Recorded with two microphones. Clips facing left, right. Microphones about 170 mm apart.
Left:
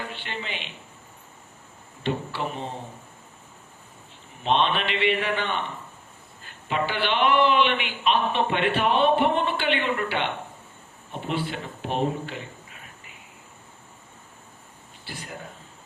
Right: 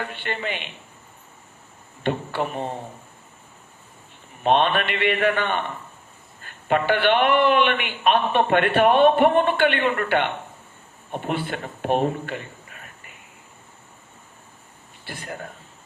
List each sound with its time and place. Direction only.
0.0 s a man's voice: 55° right (ahead or behind)
2.0 s a man's voice: 55° right (ahead or behind)
4.4 s a man's voice: 55° right (ahead or behind)
12.7 s a sound: 55° right (ahead or behind)
15.0 s a man's voice: 55° right (ahead or behind)